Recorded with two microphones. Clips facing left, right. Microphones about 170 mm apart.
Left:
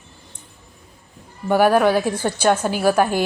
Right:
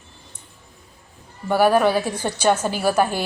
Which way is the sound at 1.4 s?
15° left (ahead or behind).